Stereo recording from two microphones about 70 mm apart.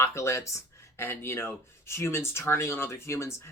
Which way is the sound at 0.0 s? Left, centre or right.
Left.